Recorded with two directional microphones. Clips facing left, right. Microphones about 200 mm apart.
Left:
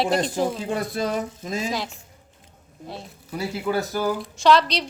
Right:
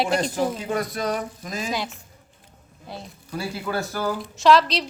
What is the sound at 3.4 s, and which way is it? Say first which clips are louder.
Speech: left 3 dB; 15° left (ahead or behind).